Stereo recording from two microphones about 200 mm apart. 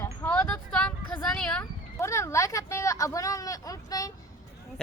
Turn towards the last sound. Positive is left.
turn(degrees=15)  # may be behind; listen again after turning